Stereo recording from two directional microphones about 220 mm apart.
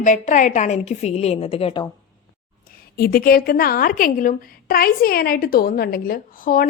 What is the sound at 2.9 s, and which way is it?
A woman's voice, 45° left (ahead or behind).